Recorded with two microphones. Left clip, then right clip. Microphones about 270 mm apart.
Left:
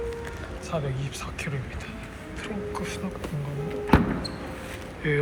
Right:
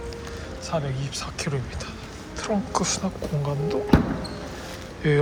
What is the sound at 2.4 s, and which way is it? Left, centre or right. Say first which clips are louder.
Speech: right 8 dB; centre.